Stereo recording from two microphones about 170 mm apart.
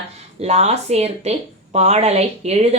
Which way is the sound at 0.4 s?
40° right (ahead or behind).